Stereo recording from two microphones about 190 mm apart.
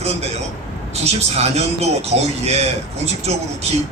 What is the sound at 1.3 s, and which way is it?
Speech, 35° right (ahead or behind).